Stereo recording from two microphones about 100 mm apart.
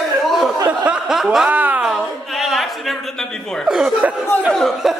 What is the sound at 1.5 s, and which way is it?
Speech, 15° right (ahead or behind).